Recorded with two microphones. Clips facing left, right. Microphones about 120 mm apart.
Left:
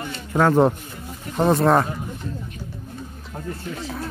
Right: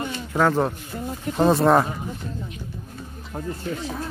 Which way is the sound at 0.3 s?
5° left (ahead or behind).